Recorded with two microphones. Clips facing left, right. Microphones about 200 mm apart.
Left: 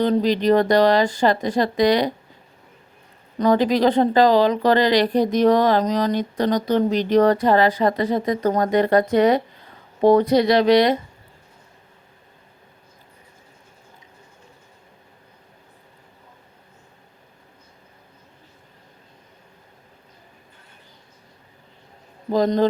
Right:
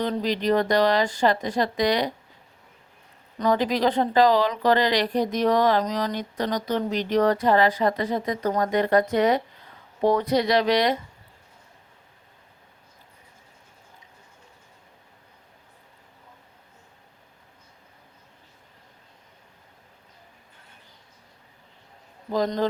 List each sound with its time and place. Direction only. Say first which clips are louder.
0.0 s speech: left 6 dB; 30° left (ahead or behind)
3.3 s speech: left 5 dB; 35° left (ahead or behind)
22.3 s a man's voice: left 6 dB; 25° left (ahead or behind)